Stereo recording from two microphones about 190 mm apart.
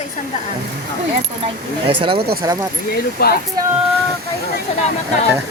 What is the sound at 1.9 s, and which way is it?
Speech, 25° right (ahead or behind).